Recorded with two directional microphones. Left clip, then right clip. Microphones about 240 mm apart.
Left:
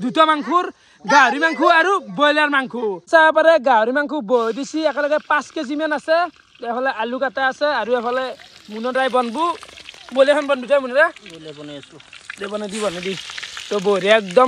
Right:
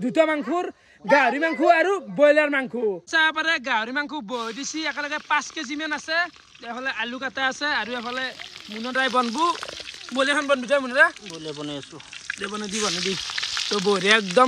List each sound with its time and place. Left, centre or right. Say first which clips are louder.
0.0 s speech: left 5 dB; centre
6.2 s speech: left 8 dB; left
6.9 s speech: left 7 dB; centre
12.3 s speech: left 3 dB; centre
13.0 s speech: right 1 dB; centre